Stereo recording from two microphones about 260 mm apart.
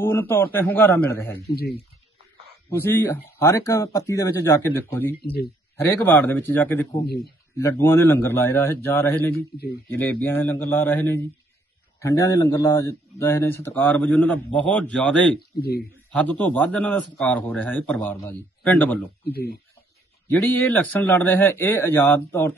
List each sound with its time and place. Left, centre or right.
0.0 s a man's voice: centre
1.5 s speech: left
2.7 s a man's voice: centre
19.3 s speech: left
20.2 s a man's voice: centre